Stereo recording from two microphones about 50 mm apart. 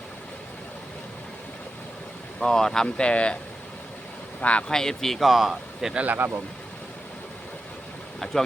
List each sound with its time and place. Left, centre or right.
2.4 s speech: centre
3.0 s speech: left
4.4 s speech: left
4.7 s speech: centre
6.1 s speech: right
8.2 s a sound: centre